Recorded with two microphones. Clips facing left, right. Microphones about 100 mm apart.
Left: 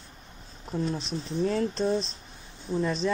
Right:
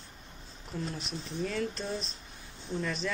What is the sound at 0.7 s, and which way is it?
Speech, 30° left (ahead or behind).